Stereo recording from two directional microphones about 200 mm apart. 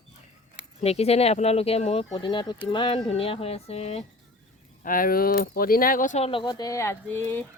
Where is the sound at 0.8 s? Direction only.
30° left (ahead or behind).